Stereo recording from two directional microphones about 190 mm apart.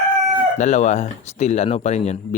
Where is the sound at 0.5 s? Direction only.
40° left (ahead or behind).